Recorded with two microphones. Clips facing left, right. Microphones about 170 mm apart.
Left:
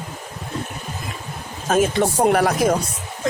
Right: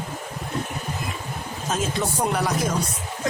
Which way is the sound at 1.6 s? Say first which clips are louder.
Left 8 dB; 60° left (ahead or behind).